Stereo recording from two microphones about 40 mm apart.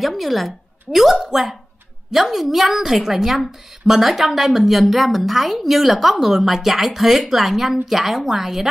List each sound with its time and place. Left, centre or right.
0.0 s a woman's voice: centre